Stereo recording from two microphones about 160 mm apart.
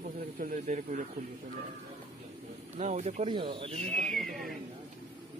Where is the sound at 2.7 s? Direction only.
45° right (ahead or behind).